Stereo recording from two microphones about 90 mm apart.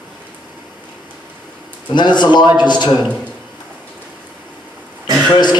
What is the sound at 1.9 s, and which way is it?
A man's voice, 55° left (ahead or behind).